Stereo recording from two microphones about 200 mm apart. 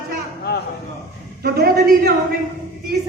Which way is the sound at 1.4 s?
50° right (ahead or behind).